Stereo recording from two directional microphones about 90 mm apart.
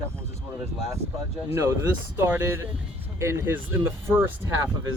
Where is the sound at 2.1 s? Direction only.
25° right (ahead or behind).